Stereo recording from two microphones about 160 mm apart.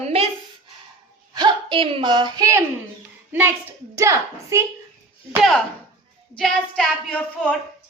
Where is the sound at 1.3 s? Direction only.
30° right (ahead or behind).